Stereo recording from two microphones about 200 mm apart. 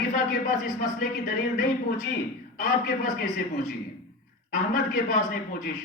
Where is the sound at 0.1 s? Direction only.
40° left (ahead or behind).